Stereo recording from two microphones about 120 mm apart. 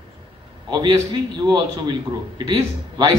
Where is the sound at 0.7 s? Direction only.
40° right (ahead or behind).